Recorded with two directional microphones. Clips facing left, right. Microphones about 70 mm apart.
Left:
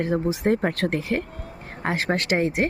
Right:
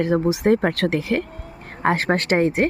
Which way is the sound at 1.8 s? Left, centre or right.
Right.